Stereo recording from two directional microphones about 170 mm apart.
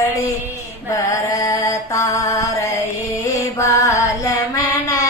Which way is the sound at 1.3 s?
20° left (ahead or behind).